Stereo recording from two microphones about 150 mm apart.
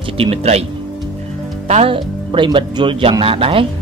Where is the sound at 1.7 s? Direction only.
45° right (ahead or behind).